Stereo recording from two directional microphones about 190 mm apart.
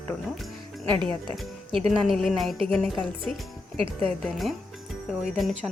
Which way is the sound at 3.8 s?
30° right (ahead or behind).